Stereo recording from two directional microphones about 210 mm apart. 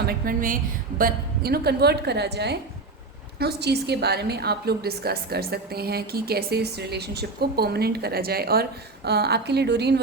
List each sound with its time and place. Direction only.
0.0 s a woman's voice: 40° right (ahead or behind)